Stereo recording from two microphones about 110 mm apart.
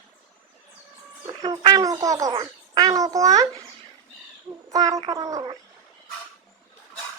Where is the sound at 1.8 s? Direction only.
30° right (ahead or behind).